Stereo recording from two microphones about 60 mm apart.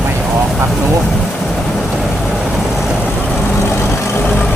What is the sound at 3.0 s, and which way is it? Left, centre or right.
Vehicle, left.